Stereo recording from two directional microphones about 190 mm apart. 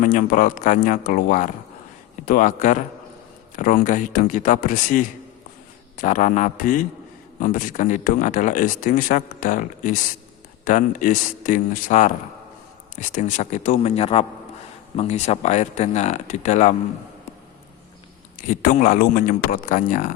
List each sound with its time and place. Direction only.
0.0 s speech: 45° left (ahead or behind)
18.4 s speech: 45° left (ahead or behind)